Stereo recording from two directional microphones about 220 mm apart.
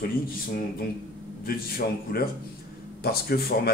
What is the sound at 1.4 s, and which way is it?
Speech, 45° left (ahead or behind).